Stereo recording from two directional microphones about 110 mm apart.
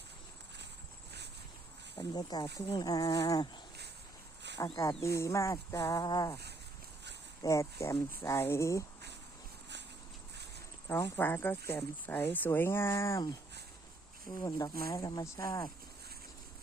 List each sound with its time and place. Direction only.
2.0 s speech: 35° left (ahead or behind)
5.0 s speech: 25° left (ahead or behind)
7.4 s speech: 30° left (ahead or behind)
10.8 s speech: 25° left (ahead or behind)